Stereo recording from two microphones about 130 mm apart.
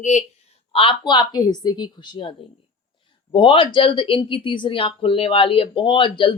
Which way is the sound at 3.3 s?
40° left (ahead or behind).